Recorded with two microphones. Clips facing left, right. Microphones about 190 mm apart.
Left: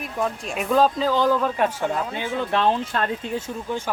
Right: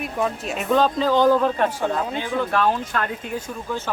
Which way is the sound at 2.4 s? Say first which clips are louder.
Even; 20° left (ahead or behind).